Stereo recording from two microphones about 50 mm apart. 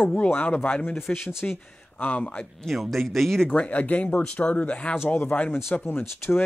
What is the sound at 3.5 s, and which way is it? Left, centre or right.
Speech, left.